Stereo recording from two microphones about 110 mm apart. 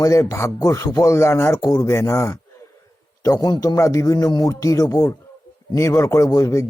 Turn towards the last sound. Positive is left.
turn(degrees=30)  # may be behind; listen again after turning